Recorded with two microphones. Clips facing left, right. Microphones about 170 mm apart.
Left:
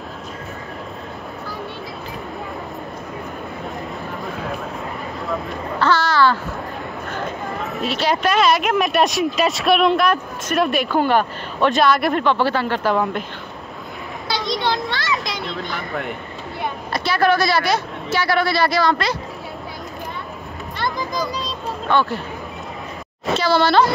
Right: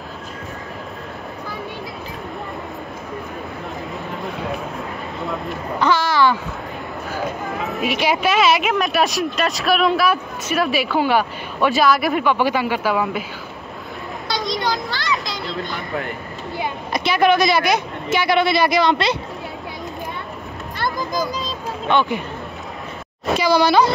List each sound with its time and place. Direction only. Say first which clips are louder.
5.2 s a sound: even; centre (ahead or behind)
5.8 s a sound: even; 15° right (ahead or behind)
7.1 s a sound: right 3 dB; 5° right (ahead or behind)
7.8 s speech: even; 15° right (ahead or behind)
14.3 s children playing: left 1 dB; centre (ahead or behind)
16.9 s a man's voice: right 2 dB; 15° right (ahead or behind)
20.7 s children playing: right 1 dB; centre (ahead or behind)
21.8 s a man's voice: right 1 dB; 20° right (ahead or behind)
23.3 s speech: right 1 dB; 15° right (ahead or behind)